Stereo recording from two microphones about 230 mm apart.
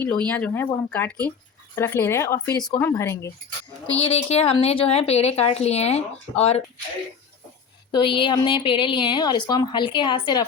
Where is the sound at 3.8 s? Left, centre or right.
Left.